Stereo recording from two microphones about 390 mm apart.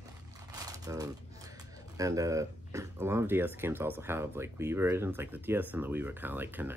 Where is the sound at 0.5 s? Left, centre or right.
Centre.